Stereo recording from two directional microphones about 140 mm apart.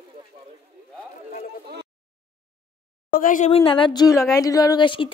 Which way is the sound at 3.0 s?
80° left.